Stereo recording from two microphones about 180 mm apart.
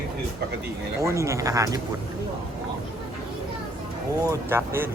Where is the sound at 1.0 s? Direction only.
15° right (ahead or behind).